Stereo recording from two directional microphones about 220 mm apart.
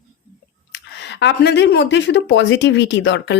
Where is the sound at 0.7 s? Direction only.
55° left (ahead or behind).